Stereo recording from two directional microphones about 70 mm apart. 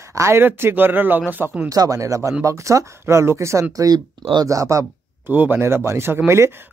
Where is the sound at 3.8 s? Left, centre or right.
Right.